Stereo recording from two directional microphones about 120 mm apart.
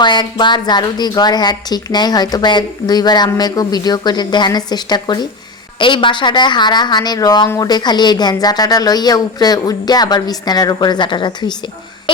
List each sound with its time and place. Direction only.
0.0 s a woman's voice: 40° left (ahead or behind)